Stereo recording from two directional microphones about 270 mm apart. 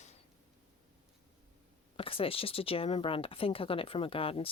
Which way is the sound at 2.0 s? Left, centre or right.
Centre.